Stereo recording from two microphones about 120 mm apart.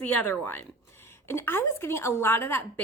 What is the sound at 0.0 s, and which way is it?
A woman's voice, 15° left (ahead or behind).